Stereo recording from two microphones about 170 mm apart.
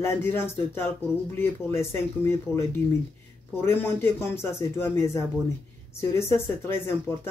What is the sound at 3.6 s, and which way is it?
Speech, 15° left (ahead or behind).